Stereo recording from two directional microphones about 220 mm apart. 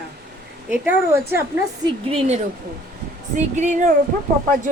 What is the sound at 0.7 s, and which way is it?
Speech, 10° right (ahead or behind).